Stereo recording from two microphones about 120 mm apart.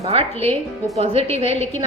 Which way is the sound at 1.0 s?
55° right (ahead or behind).